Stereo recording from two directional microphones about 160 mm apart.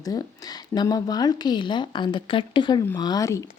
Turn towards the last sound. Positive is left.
turn(degrees=20)  # may be behind; listen again after turning